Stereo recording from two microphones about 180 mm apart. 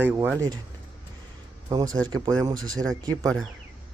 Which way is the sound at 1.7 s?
20° right (ahead or behind).